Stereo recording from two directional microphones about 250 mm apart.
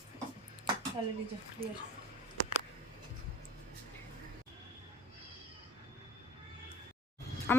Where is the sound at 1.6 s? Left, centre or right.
Right.